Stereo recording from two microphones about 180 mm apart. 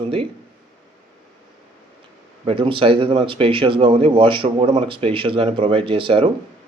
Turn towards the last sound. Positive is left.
turn(degrees=-30)  # may be behind; listen again after turning